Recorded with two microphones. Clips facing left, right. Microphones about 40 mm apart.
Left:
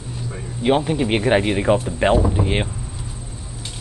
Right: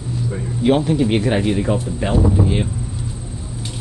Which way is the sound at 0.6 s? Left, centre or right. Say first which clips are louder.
Right 2 dB; centre.